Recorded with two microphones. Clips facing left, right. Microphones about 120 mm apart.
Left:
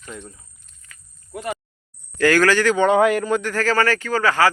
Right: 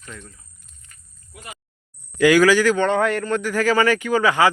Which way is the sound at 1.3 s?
65° left (ahead or behind).